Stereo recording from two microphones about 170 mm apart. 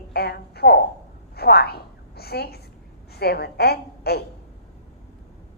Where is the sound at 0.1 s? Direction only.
70° left (ahead or behind).